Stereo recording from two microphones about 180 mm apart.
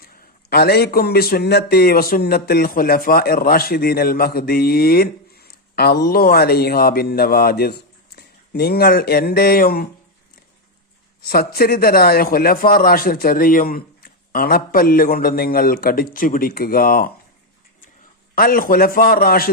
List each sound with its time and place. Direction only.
0.5 s a man's voice: 60° left (ahead or behind)
11.3 s a man's voice: 55° left (ahead or behind)
18.3 s a man's voice: 55° left (ahead or behind)